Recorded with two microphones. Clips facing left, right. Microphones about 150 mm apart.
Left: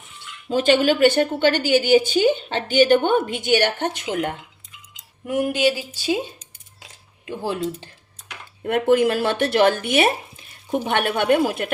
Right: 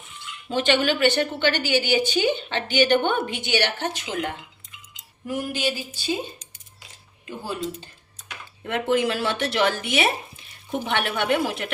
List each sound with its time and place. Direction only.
0.5 s a woman's voice: 45° left (ahead or behind)
5.2 s speech: 65° left (ahead or behind); by 6.1 s 85° left
7.3 s speech: 75° left (ahead or behind)
8.6 s a woman's voice: 50° left (ahead or behind)